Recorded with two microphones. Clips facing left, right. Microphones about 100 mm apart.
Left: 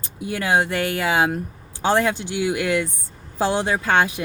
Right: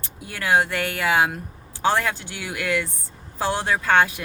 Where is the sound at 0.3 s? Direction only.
20° left (ahead or behind).